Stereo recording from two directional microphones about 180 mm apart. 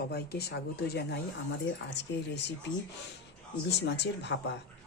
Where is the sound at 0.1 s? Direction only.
60° left (ahead or behind).